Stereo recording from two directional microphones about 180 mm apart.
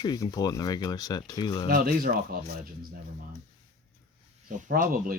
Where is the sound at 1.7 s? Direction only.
55° right (ahead or behind).